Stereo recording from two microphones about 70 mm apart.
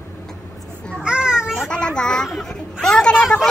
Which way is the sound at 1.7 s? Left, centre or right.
Centre.